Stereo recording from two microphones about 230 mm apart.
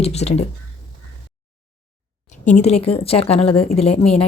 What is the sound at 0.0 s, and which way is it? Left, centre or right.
Speech, left.